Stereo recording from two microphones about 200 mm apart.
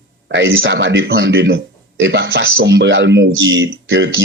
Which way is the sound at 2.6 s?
60° right (ahead or behind).